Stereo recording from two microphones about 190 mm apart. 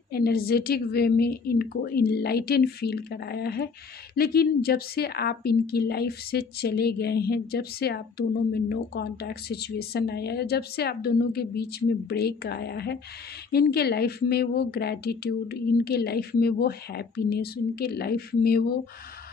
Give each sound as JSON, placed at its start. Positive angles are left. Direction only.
{"t": 0.1, "sound": "a woman's voice", "side_deg": 55}